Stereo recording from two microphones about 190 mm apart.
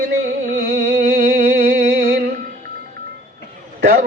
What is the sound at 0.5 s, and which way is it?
Music, 50° right (ahead or behind).